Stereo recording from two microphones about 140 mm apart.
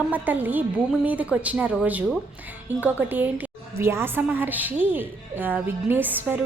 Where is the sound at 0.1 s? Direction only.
10° right (ahead or behind).